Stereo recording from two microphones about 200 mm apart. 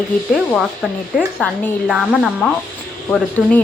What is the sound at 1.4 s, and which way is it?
Speech, centre (ahead or behind).